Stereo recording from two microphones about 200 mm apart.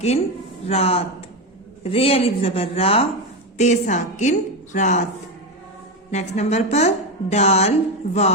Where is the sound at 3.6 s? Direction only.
35° left (ahead or behind).